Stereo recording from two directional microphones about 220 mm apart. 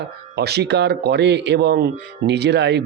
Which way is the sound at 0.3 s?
50° right (ahead or behind).